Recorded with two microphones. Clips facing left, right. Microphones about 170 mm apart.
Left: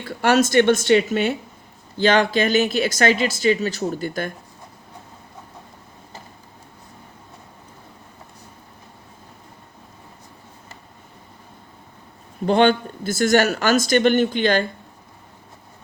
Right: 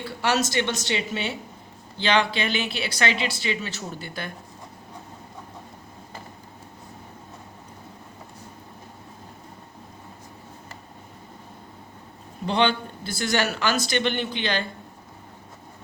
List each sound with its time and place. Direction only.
0.0 s speech: 50° left (ahead or behind)
12.5 s speech: 45° left (ahead or behind)